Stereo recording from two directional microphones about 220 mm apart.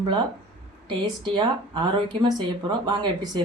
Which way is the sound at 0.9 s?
20° right (ahead or behind).